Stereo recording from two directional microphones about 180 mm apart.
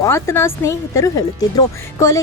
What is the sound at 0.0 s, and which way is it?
Speech, 15° left (ahead or behind).